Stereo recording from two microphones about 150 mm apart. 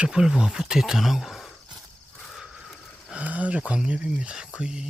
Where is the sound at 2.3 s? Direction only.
Centre (ahead or behind).